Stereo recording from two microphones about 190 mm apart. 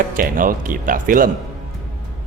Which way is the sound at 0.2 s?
45° right (ahead or behind).